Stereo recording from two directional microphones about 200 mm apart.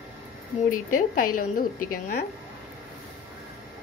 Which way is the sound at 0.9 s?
45° left (ahead or behind).